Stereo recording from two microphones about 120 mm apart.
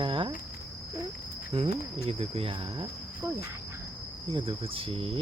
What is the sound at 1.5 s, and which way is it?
Cricket, 55° right (ahead or behind).